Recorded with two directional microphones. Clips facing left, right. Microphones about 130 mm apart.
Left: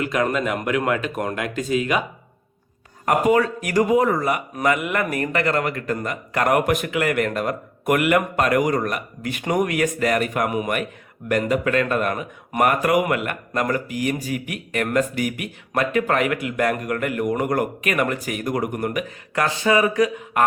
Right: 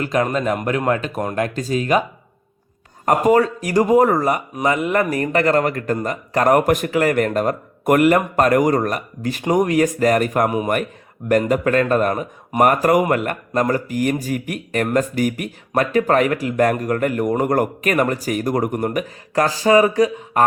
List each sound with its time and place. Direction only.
0.0 s a man's voice: 35° right (ahead or behind)
3.1 s a man's voice: 35° right (ahead or behind)
3.9 s a man's voice: 45° right (ahead or behind)
4.5 s a man's voice: 25° right (ahead or behind)